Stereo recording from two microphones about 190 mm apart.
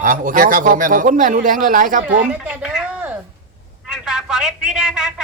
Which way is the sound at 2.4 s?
5° right (ahead or behind).